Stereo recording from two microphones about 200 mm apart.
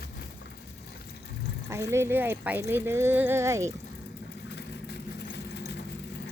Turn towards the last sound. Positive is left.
turn(degrees=55)  # may be behind; listen again after turning